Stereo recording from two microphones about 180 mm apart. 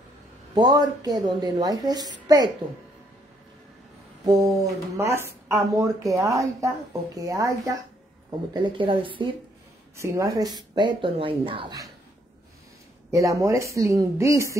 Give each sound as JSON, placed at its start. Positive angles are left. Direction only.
{"t": 0.6, "sound": "a woman's voice", "side_deg": -20}
{"t": 4.3, "sound": "speech", "side_deg": -20}
{"t": 9.9, "sound": "speech", "side_deg": -15}
{"t": 13.1, "sound": "speech", "side_deg": -15}